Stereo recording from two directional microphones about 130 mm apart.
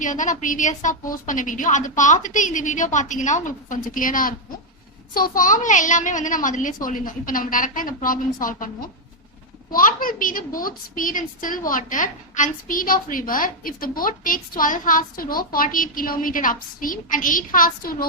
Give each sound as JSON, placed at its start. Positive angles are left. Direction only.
{"t": 0.0, "sound": "a woman's voice", "side_deg": 80}
{"t": 9.7, "sound": "a woman's voice", "side_deg": 90}